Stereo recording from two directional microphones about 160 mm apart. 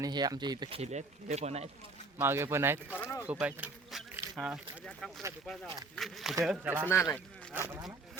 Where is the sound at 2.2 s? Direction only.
15° right (ahead or behind).